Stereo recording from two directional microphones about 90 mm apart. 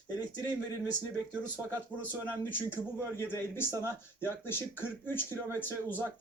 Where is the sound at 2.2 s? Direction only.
20° left (ahead or behind).